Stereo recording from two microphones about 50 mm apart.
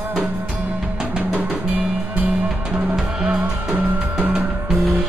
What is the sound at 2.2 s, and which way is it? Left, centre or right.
Drum kit, right.